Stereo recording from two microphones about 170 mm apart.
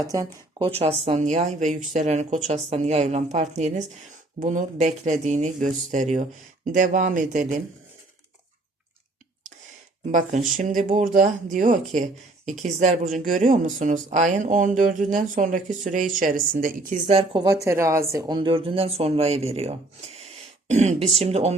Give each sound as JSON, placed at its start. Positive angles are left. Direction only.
{"t": 0.6, "sound": "speech", "side_deg": -35}
{"t": 10.1, "sound": "speech", "side_deg": -50}
{"t": 17.2, "sound": "speech", "side_deg": -25}